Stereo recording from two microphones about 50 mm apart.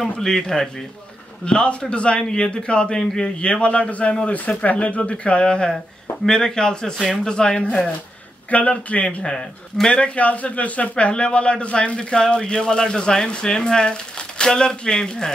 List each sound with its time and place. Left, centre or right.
0.2 s speech: centre
3.0 s speech: centre
3.3 s speech: left
8.5 s speech: left
9.2 s speech: centre